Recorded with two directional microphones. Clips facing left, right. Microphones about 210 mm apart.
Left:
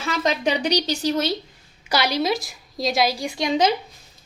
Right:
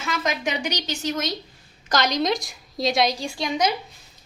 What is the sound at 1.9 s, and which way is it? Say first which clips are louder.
A woman's voice: left 1 dB; 10° left (ahead or behind).